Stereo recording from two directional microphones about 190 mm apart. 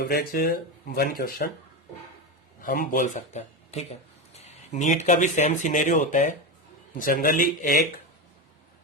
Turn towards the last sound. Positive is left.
turn(degrees=45)  # may be behind; listen again after turning